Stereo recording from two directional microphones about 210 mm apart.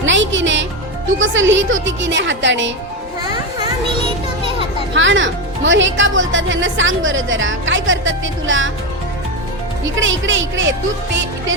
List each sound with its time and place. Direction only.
0.0 s music: 60° right (ahead or behind)
1.0 s speech: 65° right (ahead or behind)
3.2 s children playing: 20° right (ahead or behind)
4.9 s speech: 65° right (ahead or behind)
9.8 s speech: 65° right (ahead or behind)